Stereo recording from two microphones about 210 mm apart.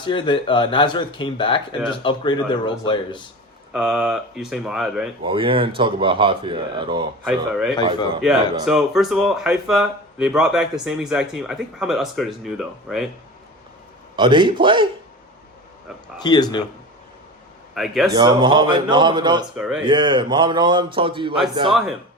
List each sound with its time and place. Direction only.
0.0 s speech: 25° left (ahead or behind)
3.7 s speech: 5° right (ahead or behind)
5.2 s speech: 25° right (ahead or behind)
7.3 s speech: centre (ahead or behind)
14.2 s speech: 20° right (ahead or behind)
16.2 s speech: 20° left (ahead or behind)
17.7 s speech: centre (ahead or behind)
18.1 s speech: 20° right (ahead or behind)
19.5 s speech: 5° right (ahead or behind)
19.8 s speech: 20° right (ahead or behind)
21.7 s speech: centre (ahead or behind)